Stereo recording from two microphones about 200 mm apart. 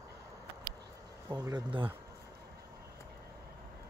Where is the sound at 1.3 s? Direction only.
15° right (ahead or behind).